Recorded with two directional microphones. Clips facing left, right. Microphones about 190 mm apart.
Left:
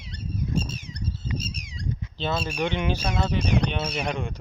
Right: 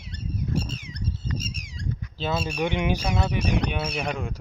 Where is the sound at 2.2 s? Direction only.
5° right (ahead or behind).